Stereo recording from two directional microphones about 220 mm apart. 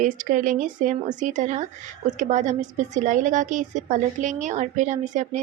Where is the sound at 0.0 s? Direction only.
35° right (ahead or behind).